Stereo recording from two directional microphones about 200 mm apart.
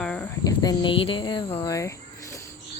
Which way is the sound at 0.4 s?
20° left (ahead or behind).